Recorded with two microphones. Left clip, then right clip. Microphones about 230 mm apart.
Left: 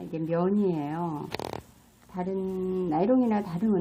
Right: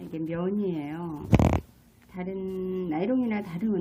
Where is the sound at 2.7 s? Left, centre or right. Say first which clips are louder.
Left 4 dB; left.